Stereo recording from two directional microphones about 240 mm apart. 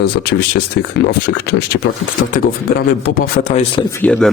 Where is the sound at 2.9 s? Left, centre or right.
Left.